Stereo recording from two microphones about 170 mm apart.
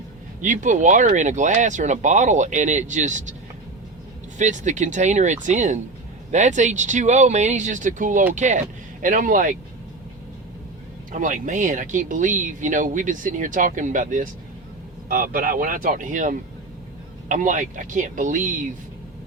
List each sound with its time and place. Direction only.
0.4 s speech: 50° right (ahead or behind)
4.4 s speech: 45° right (ahead or behind)
11.1 s speech: 50° right (ahead or behind)